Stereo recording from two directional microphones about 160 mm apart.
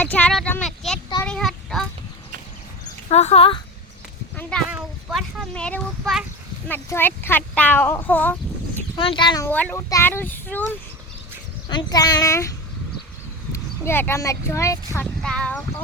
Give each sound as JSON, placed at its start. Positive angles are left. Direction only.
{"t": 0.0, "sound": "a sound", "side_deg": 10}
{"t": 3.1, "sound": "speech", "side_deg": 40}
{"t": 4.4, "sound": "a sound", "side_deg": 10}
{"t": 4.7, "sound": "a sound", "side_deg": -5}
{"t": 5.5, "sound": "speech", "side_deg": 5}
{"t": 9.0, "sound": "a child's voice", "side_deg": 30}
{"t": 9.4, "sound": "child singing", "side_deg": 10}
{"t": 11.7, "sound": "a child's voice", "side_deg": 25}
{"t": 15.0, "sound": "speech", "side_deg": 5}